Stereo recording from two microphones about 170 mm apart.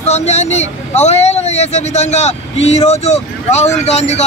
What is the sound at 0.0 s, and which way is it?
A man's voice, 40° left (ahead or behind).